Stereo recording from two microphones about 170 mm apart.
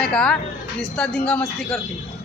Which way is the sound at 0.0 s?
5° left (ahead or behind).